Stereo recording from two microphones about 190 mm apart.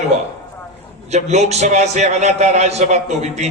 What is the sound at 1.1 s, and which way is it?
A man's voice, 35° right (ahead or behind).